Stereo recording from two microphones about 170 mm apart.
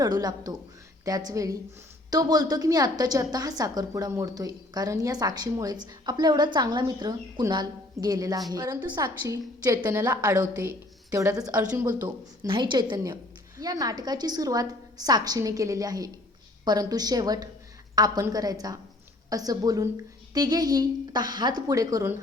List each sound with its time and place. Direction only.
0.0 s a woman's voice: 25° right (ahead or behind)
12.0 s a woman's voice: 25° right (ahead or behind)